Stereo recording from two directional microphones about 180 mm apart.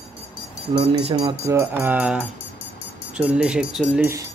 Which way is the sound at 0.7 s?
35° right (ahead or behind).